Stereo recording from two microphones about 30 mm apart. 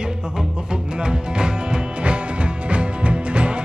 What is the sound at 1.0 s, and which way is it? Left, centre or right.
Music, right.